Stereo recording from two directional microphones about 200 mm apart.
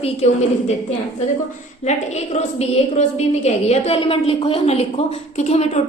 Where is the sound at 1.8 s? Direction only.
35° left (ahead or behind).